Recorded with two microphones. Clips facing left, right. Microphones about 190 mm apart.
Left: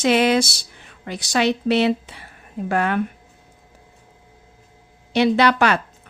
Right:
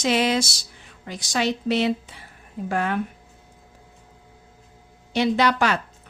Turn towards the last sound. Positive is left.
turn(degrees=65)  # may be behind; listen again after turning